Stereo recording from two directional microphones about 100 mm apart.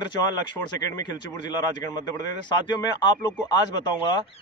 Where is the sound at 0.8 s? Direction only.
45° left (ahead or behind).